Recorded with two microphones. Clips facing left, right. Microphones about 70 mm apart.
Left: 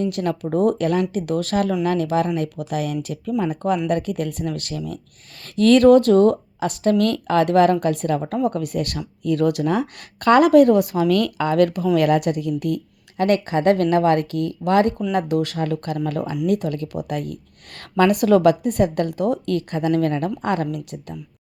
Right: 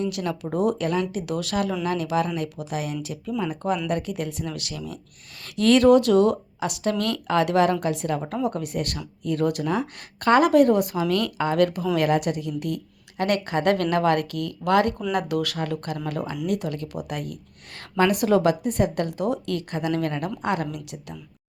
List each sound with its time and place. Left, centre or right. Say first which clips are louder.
0.0 s a woman's voice: left 4 dB; left
15.6 s a woman's voice: left 5 dB; left
17.7 s a woman's voice: left 4 dB; left